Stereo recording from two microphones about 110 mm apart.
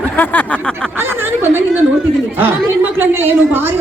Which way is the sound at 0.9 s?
20° right (ahead or behind).